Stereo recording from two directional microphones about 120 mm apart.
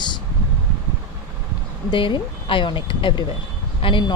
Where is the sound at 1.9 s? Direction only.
40° left (ahead or behind).